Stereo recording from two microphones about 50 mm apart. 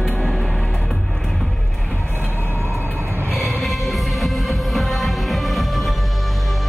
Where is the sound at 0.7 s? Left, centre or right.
Centre.